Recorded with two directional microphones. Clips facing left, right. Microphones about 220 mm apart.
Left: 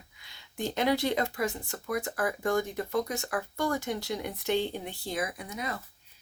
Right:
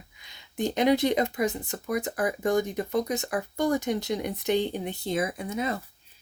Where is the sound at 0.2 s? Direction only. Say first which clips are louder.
Right 5 dB; 20° right (ahead or behind).